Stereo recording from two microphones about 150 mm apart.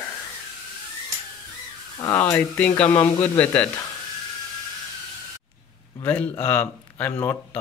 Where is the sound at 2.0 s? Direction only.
15° left (ahead or behind).